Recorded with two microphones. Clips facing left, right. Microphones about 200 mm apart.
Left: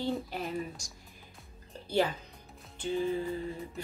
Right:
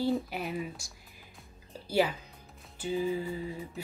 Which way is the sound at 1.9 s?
10° right (ahead or behind).